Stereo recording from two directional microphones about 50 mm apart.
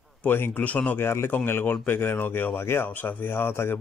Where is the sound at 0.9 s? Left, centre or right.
Left.